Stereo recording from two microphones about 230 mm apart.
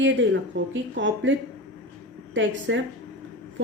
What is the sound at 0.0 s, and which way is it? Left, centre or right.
Speech, right.